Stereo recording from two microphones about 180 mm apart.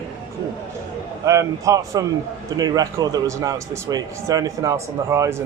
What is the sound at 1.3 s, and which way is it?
A man's voice, 15° right (ahead or behind).